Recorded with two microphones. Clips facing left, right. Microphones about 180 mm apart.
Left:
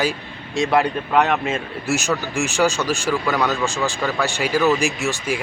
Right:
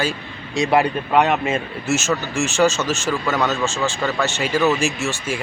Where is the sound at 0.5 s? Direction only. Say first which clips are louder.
Right 1 dB; centre (ahead or behind).